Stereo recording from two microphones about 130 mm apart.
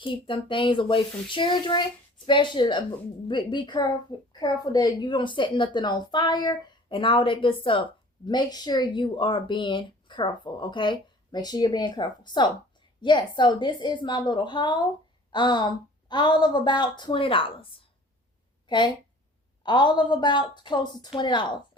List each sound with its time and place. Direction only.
0.0 s speech: 40° left (ahead or behind)